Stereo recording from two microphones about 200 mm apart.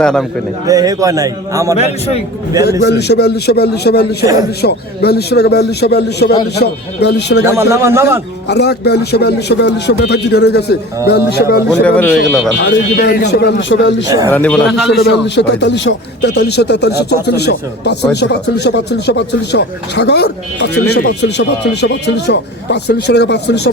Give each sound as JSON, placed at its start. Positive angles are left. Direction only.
{"t": 0.0, "sound": "a man's voice", "side_deg": 5}
{"t": 0.7, "sound": "a man's voice", "side_deg": -15}
{"t": 1.7, "sound": "a man's voice", "side_deg": 30}
{"t": 2.8, "sound": "a man's voice", "side_deg": 55}
{"t": 7.4, "sound": "a man's voice", "side_deg": -15}
{"t": 8.4, "sound": "a man's voice", "side_deg": 55}
{"t": 11.7, "sound": "a man's voice", "side_deg": 5}
{"t": 12.5, "sound": "a man's voice", "side_deg": 60}
{"t": 14.3, "sound": "a man's voice", "side_deg": 10}
{"t": 14.8, "sound": "a man's voice", "side_deg": 60}